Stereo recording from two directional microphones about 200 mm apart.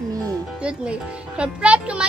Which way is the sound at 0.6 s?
5° right (ahead or behind).